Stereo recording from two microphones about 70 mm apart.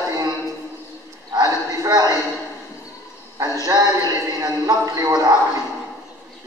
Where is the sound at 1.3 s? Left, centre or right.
Right.